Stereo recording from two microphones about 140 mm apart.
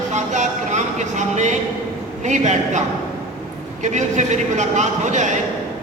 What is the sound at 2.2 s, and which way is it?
Speech, 60° right (ahead or behind).